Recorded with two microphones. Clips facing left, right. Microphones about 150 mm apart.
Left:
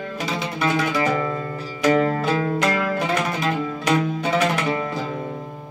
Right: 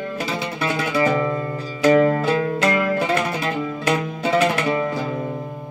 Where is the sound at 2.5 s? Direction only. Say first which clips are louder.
Right 2 dB; 5° right (ahead or behind).